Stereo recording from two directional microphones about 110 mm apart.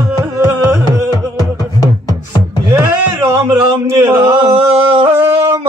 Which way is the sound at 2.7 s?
30° right (ahead or behind).